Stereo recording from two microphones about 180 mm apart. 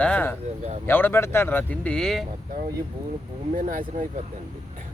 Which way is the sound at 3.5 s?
50° right (ahead or behind).